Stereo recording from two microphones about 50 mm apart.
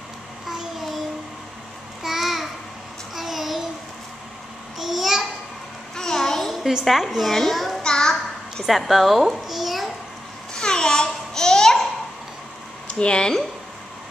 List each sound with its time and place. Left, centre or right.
2.0 s babbling: centre
4.7 s babbling: centre
5.9 s a sound: centre
6.6 s a woman's voice: centre
7.3 s child singing: centre
7.8 s a sound: centre
8.6 s a child's voice: centre
10.5 s babbling: centre
12.8 s speech: centre